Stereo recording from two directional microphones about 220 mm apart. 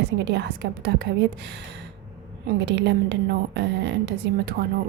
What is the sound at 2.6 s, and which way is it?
Speech, 50° right (ahead or behind).